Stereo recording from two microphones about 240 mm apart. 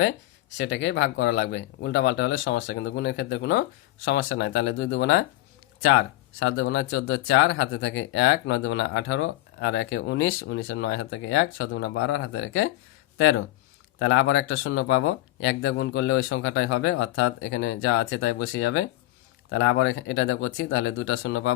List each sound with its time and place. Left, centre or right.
0.5 s speech: left
6.4 s speech: left